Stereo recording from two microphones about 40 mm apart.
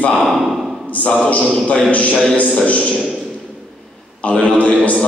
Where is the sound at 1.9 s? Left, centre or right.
Left.